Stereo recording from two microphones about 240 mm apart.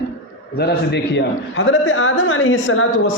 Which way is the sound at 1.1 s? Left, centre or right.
Left.